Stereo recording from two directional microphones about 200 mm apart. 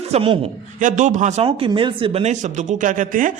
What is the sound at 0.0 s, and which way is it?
A man's voice, 30° right (ahead or behind).